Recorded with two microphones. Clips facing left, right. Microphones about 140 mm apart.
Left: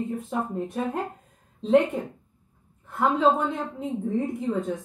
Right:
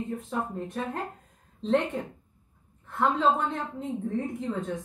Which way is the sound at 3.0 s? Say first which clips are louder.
Left 3 dB; 5° left (ahead or behind).